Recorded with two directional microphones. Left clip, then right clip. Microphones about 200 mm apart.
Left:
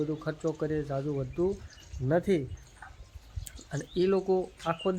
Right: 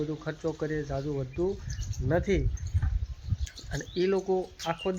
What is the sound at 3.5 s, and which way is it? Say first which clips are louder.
Speech: even; 10° left (ahead or behind).